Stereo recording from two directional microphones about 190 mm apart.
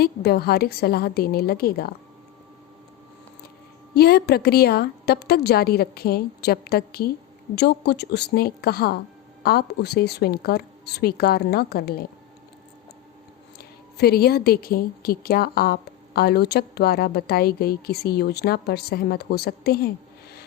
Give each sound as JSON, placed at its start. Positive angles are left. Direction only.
{"t": 0.0, "sound": "a woman's voice", "side_deg": 55}
{"t": 3.9, "sound": "a woman's voice", "side_deg": 55}
{"t": 13.6, "sound": "a woman's voice", "side_deg": 55}